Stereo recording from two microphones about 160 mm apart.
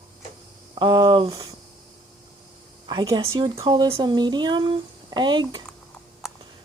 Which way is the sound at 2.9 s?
30° right (ahead or behind).